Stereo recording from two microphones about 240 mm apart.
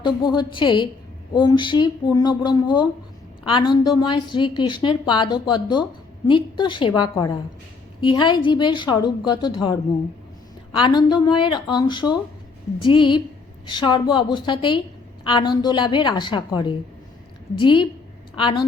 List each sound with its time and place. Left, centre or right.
0.0 s a woman's voice: centre
10.7 s a woman's voice: centre